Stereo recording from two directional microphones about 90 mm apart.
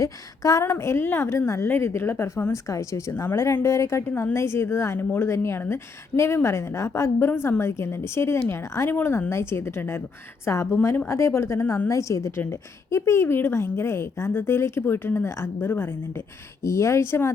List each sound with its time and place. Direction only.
0.0 s a woman's voice: 40° left (ahead or behind)
3.1 s a woman's voice: 25° left (ahead or behind)